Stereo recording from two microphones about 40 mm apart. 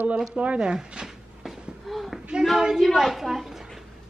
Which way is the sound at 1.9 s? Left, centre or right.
Centre.